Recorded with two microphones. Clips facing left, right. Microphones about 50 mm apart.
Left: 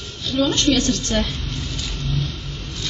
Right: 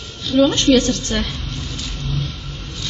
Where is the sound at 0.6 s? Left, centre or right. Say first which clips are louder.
Right 4 dB; right.